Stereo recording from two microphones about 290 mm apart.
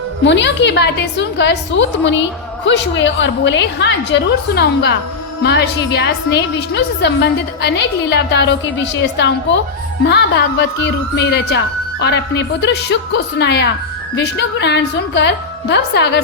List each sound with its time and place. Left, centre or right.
0.3 s a woman's voice: left